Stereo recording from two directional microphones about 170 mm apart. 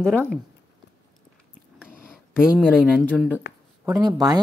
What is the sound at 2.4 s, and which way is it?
Speech, 5° right (ahead or behind).